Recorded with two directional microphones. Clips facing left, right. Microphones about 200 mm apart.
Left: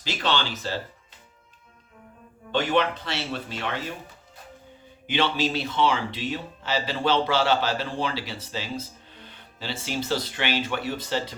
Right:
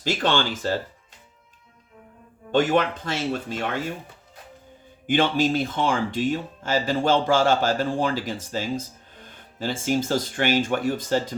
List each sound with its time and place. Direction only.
0.0 s speech: 50° right (ahead or behind)
2.5 s speech: 45° right (ahead or behind)
5.0 s speech: 50° right (ahead or behind)